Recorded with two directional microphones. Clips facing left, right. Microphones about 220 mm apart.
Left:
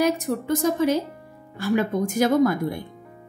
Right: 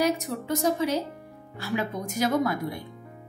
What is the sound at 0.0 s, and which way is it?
A woman's voice, 50° left (ahead or behind).